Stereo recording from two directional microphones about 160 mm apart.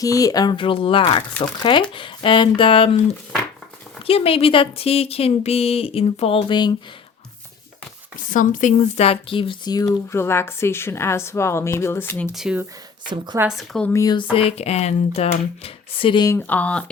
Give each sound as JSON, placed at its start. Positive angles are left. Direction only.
{"t": 0.0, "sound": "speech", "side_deg": 20}
{"t": 8.3, "sound": "speech", "side_deg": 55}
{"t": 12.3, "sound": "speech", "side_deg": -5}
{"t": 13.1, "sound": "a woman's voice", "side_deg": -25}
{"t": 13.6, "sound": "speech", "side_deg": 5}
{"t": 13.9, "sound": "speech", "side_deg": 25}
{"t": 14.3, "sound": "speech", "side_deg": 40}
{"t": 16.3, "sound": "speech", "side_deg": 10}